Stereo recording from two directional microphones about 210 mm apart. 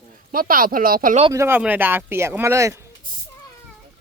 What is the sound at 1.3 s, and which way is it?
Speech, 10° right (ahead or behind).